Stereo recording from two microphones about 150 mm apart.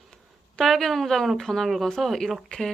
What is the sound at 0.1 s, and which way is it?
Speech, centre (ahead or behind).